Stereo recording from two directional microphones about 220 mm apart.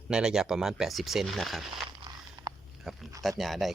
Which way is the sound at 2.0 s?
20° right (ahead or behind).